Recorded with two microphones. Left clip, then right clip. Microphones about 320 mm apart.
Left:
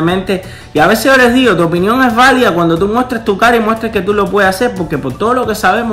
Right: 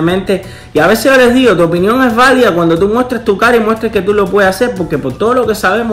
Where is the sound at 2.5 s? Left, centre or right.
Centre.